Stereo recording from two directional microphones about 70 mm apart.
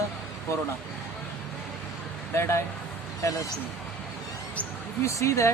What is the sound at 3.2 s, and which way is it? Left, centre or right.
Speech, left.